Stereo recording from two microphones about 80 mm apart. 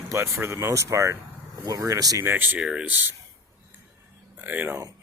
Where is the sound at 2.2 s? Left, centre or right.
Right.